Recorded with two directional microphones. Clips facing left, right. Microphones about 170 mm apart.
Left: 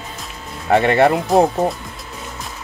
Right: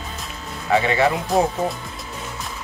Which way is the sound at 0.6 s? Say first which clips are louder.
Left 5 dB; 60° left (ahead or behind).